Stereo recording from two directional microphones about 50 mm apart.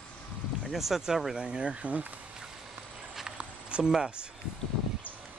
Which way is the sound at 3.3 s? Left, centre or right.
Centre.